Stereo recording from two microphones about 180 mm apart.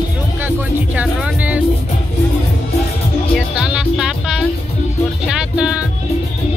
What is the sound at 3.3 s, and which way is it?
Music, 5° right (ahead or behind).